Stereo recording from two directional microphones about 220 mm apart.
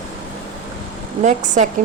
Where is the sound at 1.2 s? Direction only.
35° right (ahead or behind).